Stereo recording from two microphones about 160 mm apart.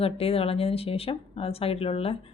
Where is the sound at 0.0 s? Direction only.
35° left (ahead or behind).